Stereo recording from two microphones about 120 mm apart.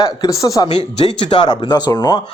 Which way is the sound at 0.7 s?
40° left (ahead or behind).